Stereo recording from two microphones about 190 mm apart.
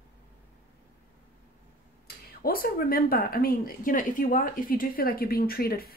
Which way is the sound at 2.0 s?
50° left (ahead or behind).